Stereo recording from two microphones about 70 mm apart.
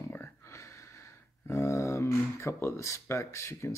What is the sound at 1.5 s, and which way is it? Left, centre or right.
Speech, left.